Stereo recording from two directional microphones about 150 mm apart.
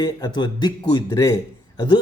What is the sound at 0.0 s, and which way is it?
Speech, 30° left (ahead or behind).